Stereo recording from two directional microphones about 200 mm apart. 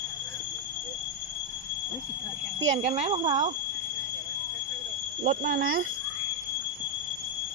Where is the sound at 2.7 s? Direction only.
35° right (ahead or behind).